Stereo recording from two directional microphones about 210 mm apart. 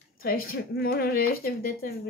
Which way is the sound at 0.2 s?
45° left (ahead or behind).